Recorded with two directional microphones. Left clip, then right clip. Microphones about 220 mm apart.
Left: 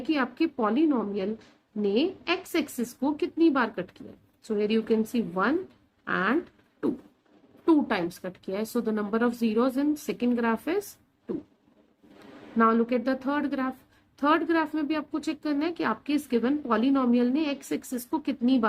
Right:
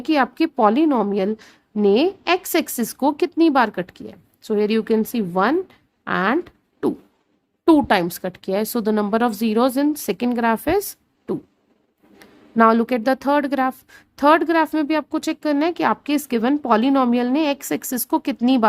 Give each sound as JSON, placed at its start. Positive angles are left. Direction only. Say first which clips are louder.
{"t": 0.0, "sound": "speech", "louder": "right 8 dB", "side_deg": -50}
{"t": 7.6, "sound": "speech", "louder": "right 9 dB", "side_deg": -50}
{"t": 12.5, "sound": "speech", "louder": "right 8 dB", "side_deg": -50}